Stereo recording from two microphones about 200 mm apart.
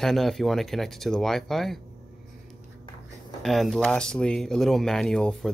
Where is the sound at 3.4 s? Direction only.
Centre (ahead or behind).